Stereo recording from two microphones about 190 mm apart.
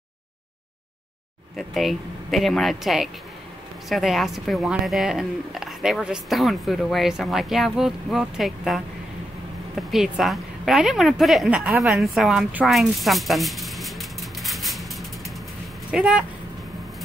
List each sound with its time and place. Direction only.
1.6 s a woman's voice: centre (ahead or behind)